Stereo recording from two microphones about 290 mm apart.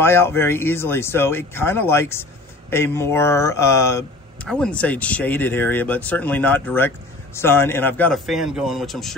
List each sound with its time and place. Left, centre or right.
0.0 s speech: centre